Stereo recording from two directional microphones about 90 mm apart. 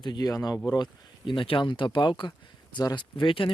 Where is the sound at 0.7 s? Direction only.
55° left (ahead or behind).